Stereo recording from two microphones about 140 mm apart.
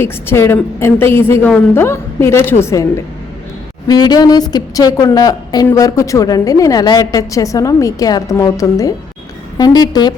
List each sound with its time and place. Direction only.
0.0 s a woman's voice: 15° left (ahead or behind)
3.8 s a woman's voice: 30° left (ahead or behind)